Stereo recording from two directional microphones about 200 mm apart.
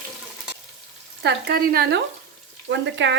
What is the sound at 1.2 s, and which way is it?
Speech, 55° right (ahead or behind).